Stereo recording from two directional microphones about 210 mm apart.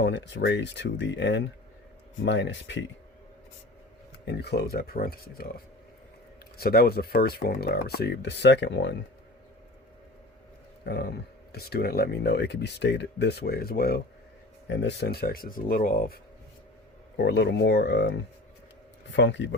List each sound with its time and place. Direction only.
0.0 s speech: 55° left (ahead or behind)
4.3 s speech: 50° left (ahead or behind)
6.6 s speech: 45° left (ahead or behind)
10.8 s speech: 50° left (ahead or behind)
14.7 s speech: 60° left (ahead or behind)